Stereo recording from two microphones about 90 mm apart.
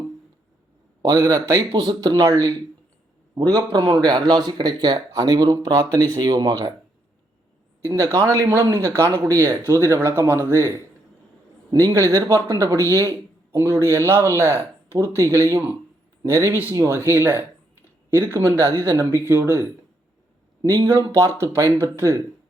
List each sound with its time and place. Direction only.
1.1 s speech: 35° right (ahead or behind)
1.7 s speech: 50° right (ahead or behind)
2.2 s speech: 30° right (ahead or behind)
7.9 s speech: 35° right (ahead or behind)
20.8 s speech: 30° right (ahead or behind)